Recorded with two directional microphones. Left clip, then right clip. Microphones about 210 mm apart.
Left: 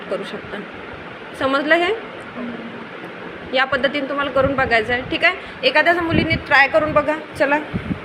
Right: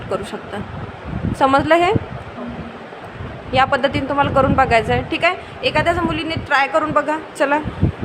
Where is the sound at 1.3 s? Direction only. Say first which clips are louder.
Right 3 dB; 25° right (ahead or behind).